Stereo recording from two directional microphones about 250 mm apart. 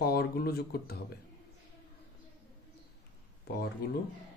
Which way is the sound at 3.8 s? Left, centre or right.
Left.